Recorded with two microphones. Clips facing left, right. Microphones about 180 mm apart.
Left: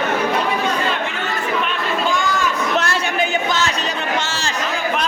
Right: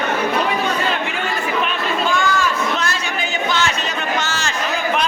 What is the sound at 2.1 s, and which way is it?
Chatter, 15° left (ahead or behind).